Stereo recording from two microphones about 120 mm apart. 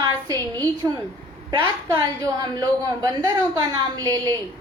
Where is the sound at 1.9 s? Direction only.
35° right (ahead or behind).